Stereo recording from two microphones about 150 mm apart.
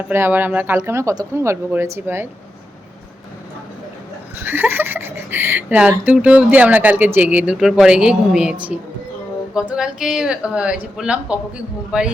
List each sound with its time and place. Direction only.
0.1 s speech: 15° right (ahead or behind)
4.4 s speech: 15° right (ahead or behind)